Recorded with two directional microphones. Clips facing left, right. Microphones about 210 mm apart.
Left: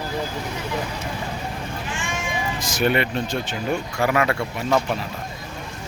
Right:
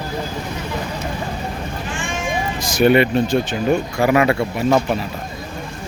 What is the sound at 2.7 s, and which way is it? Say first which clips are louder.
Speech: right 8 dB; 15° right (ahead or behind).